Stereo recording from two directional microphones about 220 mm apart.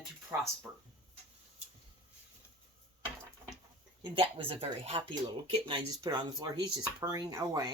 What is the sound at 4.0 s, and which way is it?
Speech, 25° right (ahead or behind).